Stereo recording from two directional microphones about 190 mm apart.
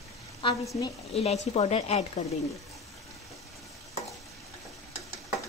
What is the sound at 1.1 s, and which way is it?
Speech, 35° left (ahead or behind).